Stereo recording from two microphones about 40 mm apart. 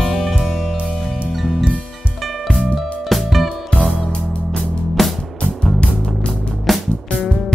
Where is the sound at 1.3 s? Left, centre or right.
Centre.